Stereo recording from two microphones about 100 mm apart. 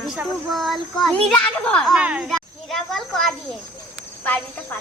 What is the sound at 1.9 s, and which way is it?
Speech, 10° right (ahead or behind).